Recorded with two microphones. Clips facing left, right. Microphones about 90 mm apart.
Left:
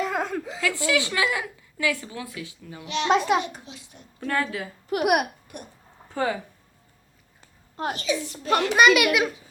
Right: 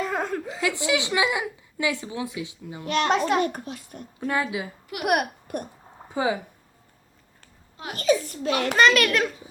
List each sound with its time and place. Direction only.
0.0 s chuckle: centre (ahead or behind)
0.6 s a woman's voice: 20° right (ahead or behind)
2.8 s a child's voice: 50° right (ahead or behind)
3.1 s speech: 5° left (ahead or behind)
3.4 s a child's voice: 50° right (ahead or behind)
4.2 s speech: 10° right (ahead or behind)
5.0 s speech: 5° left (ahead or behind)
5.5 s speech: 45° right (ahead or behind)
6.1 s speech: 15° right (ahead or behind)
7.9 s a child's voice: 45° right (ahead or behind)
8.7 s a child's voice: 10° left (ahead or behind)